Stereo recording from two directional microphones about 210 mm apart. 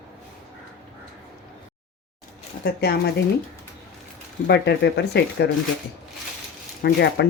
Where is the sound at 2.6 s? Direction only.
50° left (ahead or behind).